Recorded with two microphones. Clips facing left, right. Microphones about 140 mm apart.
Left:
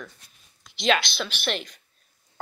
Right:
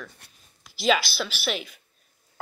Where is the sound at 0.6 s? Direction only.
5° right (ahead or behind).